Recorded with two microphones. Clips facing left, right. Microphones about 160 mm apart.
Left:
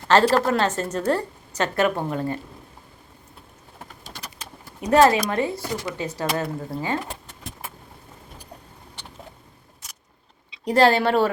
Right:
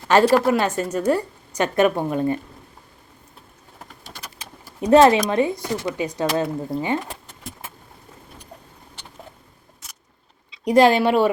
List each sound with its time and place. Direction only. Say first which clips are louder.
0.1 s a woman's voice: right 2 dB; 10° right (ahead or behind)
4.9 s speech: right 3 dB; 25° right (ahead or behind)
10.7 s a woman's voice: right 3 dB; 15° right (ahead or behind)